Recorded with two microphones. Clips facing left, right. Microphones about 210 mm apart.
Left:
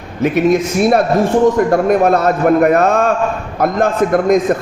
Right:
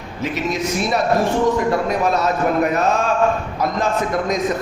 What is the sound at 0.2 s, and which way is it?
A man's voice, 55° left (ahead or behind).